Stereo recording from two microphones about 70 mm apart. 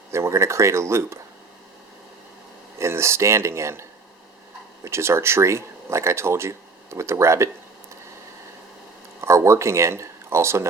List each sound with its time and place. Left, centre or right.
0.1 s speech: right
2.7 s speech: right
9.2 s speech: right